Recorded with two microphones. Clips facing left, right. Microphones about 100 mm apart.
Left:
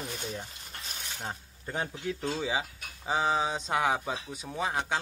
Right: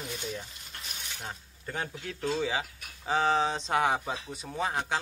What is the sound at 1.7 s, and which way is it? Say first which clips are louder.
Speech: left 3 dB; 20° left (ahead or behind).